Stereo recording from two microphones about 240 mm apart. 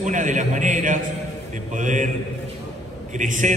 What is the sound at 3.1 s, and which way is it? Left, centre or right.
Speech, right.